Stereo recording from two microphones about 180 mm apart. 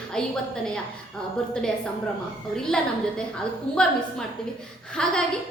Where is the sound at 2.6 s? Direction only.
5° left (ahead or behind).